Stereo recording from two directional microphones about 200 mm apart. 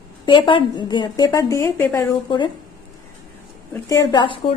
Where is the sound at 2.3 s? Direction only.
25° left (ahead or behind).